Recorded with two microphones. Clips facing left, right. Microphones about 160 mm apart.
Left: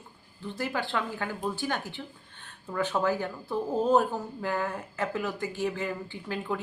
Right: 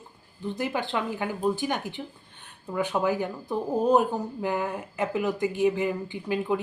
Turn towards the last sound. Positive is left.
turn(degrees=-15)  # may be behind; listen again after turning